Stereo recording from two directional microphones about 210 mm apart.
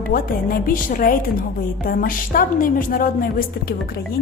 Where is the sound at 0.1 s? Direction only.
40° left (ahead or behind).